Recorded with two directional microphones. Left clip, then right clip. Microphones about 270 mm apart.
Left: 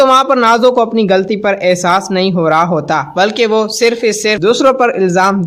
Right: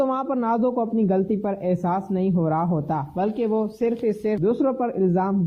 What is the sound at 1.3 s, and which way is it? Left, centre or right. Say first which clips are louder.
A man's voice: left 13 dB; centre.